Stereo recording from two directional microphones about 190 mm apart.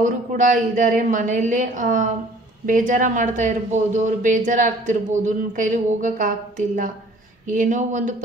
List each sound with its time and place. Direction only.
0.0 s speech: 45° right (ahead or behind)